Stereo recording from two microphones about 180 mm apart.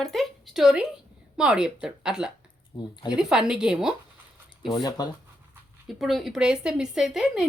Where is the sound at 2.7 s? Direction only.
30° left (ahead or behind).